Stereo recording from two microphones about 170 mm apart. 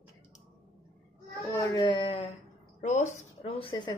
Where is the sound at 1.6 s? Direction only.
25° left (ahead or behind).